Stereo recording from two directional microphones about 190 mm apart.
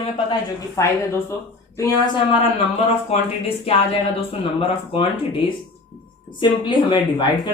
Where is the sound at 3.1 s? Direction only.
30° left (ahead or behind).